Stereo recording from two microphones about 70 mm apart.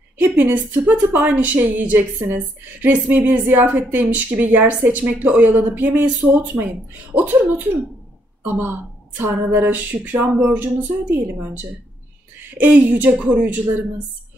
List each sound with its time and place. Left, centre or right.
0.2 s a woman's voice: right